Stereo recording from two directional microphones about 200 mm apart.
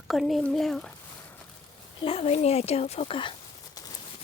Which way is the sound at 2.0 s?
30° left (ahead or behind).